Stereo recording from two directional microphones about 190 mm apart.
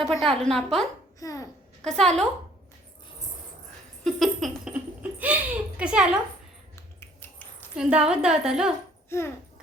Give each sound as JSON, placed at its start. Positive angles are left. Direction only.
{"t": 0.0, "sound": "a woman's voice", "side_deg": 0}
{"t": 1.2, "sound": "a child's voice", "side_deg": 20}
{"t": 1.8, "sound": "a woman's voice", "side_deg": 5}
{"t": 4.0, "sound": "a woman's voice", "side_deg": 0}
{"t": 5.2, "sound": "a sound", "side_deg": -5}
{"t": 6.7, "sound": "a sound", "side_deg": 10}
{"t": 7.8, "sound": "a woman's voice", "side_deg": -5}
{"t": 9.0, "sound": "a child's voice", "side_deg": 15}